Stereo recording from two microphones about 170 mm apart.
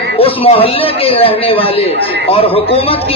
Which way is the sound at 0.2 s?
35° left (ahead or behind).